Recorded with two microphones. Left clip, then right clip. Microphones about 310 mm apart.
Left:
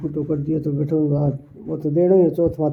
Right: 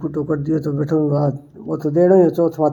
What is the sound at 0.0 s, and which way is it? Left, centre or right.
A man's voice, right.